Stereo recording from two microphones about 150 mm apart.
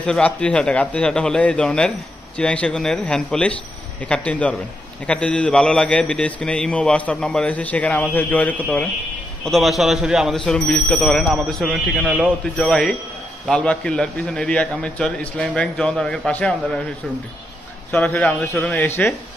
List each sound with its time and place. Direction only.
0.0 s a man's voice: 5° left (ahead or behind)
10.4 s a man's voice: 5° left (ahead or behind)
17.9 s a man's voice: 10° left (ahead or behind)